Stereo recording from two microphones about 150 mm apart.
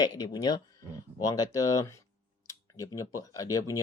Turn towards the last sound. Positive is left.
turn(degrees=25)  # may be behind; listen again after turning